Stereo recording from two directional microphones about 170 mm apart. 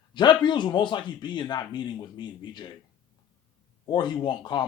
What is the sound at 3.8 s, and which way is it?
Speech, 25° left (ahead or behind).